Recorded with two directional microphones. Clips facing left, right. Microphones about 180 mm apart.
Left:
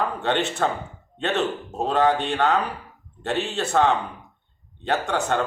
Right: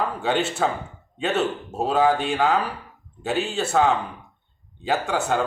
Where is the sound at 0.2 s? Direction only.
5° right (ahead or behind).